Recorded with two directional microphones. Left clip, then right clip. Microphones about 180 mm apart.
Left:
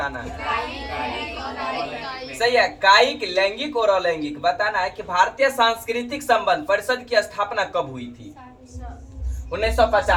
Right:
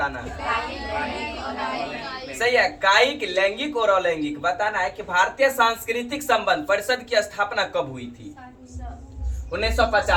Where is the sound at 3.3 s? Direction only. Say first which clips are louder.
Left 1 dB; 15° left (ahead or behind).